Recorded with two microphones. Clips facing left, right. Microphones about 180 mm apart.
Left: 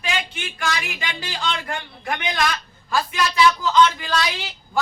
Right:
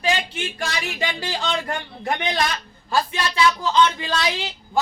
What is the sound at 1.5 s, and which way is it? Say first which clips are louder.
A man's voice: right 2 dB; 35° right (ahead or behind).